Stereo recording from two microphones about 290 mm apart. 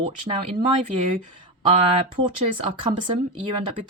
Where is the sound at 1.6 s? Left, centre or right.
Right.